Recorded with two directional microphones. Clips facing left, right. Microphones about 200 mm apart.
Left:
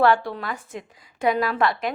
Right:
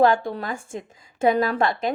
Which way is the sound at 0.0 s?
45° right (ahead or behind).